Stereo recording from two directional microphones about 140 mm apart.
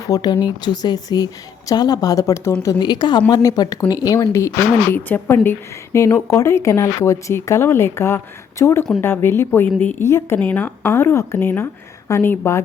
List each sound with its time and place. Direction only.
0.1 s a woman's voice: 30° left (ahead or behind)
2.7 s a woman's voice: 30° left (ahead or behind)